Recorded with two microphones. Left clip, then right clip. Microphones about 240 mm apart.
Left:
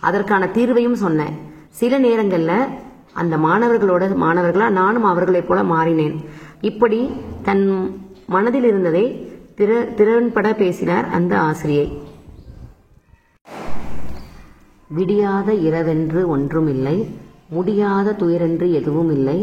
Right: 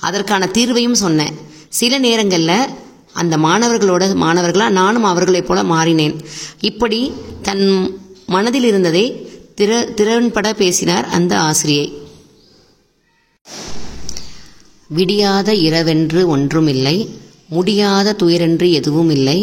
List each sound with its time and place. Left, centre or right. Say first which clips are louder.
0.0 s a man's voice: right 1 dB; right
15.0 s a man's voice: right 4 dB; right